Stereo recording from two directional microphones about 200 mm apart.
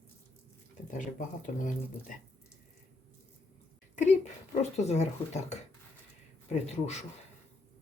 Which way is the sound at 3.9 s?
35° left (ahead or behind).